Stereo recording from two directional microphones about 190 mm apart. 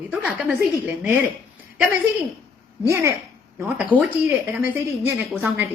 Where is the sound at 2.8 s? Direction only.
15° right (ahead or behind).